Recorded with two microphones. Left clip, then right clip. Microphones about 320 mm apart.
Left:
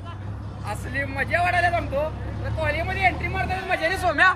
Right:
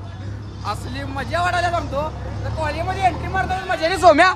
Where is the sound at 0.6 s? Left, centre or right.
Centre.